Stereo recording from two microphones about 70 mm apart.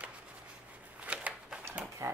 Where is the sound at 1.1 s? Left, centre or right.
Centre.